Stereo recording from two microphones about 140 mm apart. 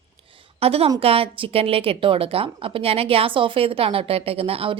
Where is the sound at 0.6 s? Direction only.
45° right (ahead or behind).